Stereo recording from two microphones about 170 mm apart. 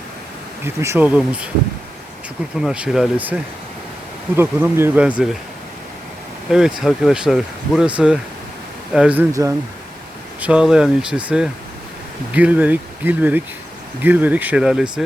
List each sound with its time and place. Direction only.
0.6 s speech: 15° right (ahead or behind)
2.6 s speech: 5° right (ahead or behind)
6.5 s speech: 5° right (ahead or behind)
9.3 s speech: 20° right (ahead or behind)
10.4 s speech: 5° right (ahead or behind)